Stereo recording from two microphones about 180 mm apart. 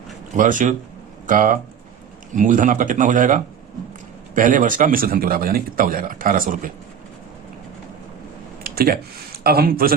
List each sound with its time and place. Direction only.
0.3 s a man's voice: 45° right (ahead or behind)
8.6 s a sound: 55° right (ahead or behind)
9.4 s a man's voice: 60° right (ahead or behind)